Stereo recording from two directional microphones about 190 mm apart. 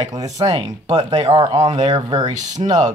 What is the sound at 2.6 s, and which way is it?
Speech, 40° right (ahead or behind).